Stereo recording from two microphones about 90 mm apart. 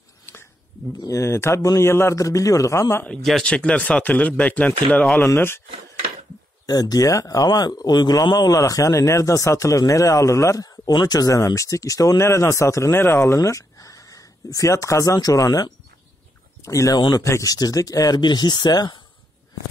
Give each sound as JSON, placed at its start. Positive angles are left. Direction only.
{"t": 0.9, "sound": "speech", "side_deg": 35}
{"t": 3.4, "sound": "speech", "side_deg": 15}
{"t": 5.2, "sound": "speech", "side_deg": 30}
{"t": 6.6, "sound": "speech", "side_deg": 45}
{"t": 18.2, "sound": "speech", "side_deg": 55}